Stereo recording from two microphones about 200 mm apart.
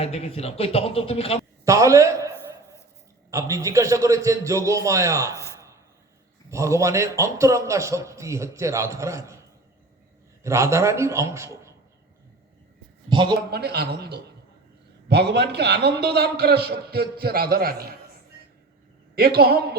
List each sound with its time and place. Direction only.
0.0 s speech: 30° left (ahead or behind)
1.6 s a man's voice: 15° right (ahead or behind)
3.3 s a man's voice: 15° right (ahead or behind)
6.5 s a man's voice: 15° right (ahead or behind)
10.4 s a man's voice: 15° right (ahead or behind)
13.1 s a man's voice: 20° right (ahead or behind)
13.5 s a man's voice: 55° right (ahead or behind)
19.1 s a man's voice: 50° right (ahead or behind)